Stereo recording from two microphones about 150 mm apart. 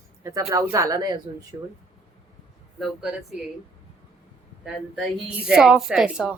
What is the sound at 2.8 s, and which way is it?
Speech, centre (ahead or behind).